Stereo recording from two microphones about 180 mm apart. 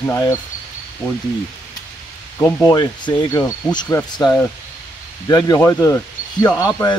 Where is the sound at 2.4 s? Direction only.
15° left (ahead or behind).